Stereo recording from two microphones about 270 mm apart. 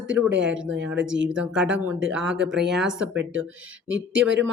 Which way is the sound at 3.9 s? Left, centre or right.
Right.